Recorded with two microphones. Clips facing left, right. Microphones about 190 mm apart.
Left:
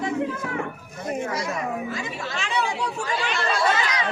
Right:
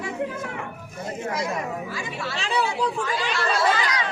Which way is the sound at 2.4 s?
35° right (ahead or behind).